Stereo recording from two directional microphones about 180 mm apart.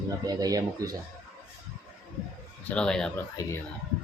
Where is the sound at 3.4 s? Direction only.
20° left (ahead or behind).